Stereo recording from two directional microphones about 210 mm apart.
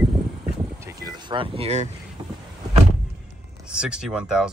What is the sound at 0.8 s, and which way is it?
Boat, 15° right (ahead or behind).